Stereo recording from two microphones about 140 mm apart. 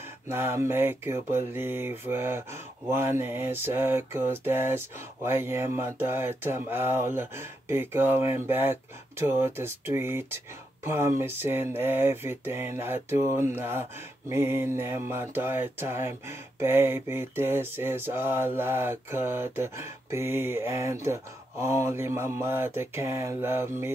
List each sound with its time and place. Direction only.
0.3 s mantra: 15° right (ahead or behind)